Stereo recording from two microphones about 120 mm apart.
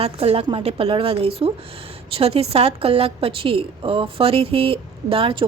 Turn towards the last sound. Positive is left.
turn(degrees=-50)  # may be behind; listen again after turning